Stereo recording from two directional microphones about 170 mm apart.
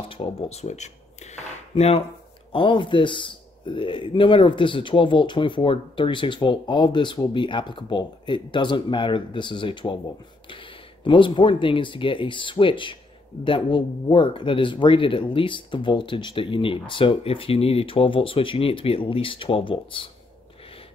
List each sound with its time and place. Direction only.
0.1 s speech: 35° left (ahead or behind)